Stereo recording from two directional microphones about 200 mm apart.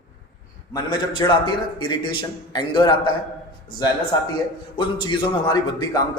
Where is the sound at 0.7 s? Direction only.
20° left (ahead or behind).